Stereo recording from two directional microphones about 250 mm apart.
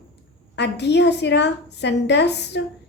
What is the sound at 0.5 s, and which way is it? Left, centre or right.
A woman's voice, left.